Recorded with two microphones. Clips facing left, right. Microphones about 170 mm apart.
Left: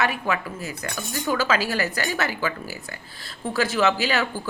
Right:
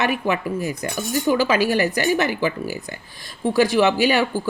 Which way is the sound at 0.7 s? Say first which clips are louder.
Right 7 dB; 15° right (ahead or behind).